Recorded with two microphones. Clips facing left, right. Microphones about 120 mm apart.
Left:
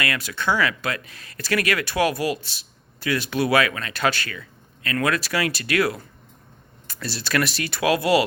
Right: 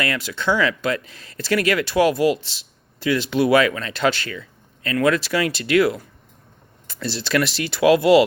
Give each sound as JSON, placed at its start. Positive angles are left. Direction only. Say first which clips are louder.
{"t": 0.0, "sound": "speech", "louder": "right 2 dB", "side_deg": -20}